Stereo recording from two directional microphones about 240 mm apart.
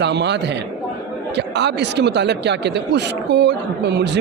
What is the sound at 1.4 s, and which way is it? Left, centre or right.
Speech, right.